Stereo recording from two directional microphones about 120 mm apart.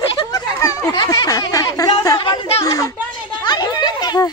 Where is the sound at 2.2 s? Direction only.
40° left (ahead or behind).